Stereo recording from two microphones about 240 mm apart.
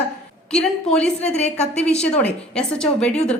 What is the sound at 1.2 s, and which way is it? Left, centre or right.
Speech, left.